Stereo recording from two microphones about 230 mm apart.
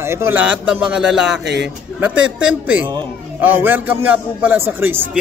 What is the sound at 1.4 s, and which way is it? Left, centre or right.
Speech, right.